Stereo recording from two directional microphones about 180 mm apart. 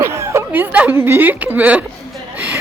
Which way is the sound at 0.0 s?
15° right (ahead or behind).